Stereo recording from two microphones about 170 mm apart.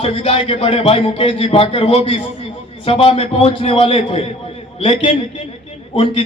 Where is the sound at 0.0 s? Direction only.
35° left (ahead or behind).